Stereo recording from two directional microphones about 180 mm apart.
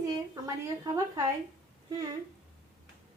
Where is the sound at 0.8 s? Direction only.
20° right (ahead or behind).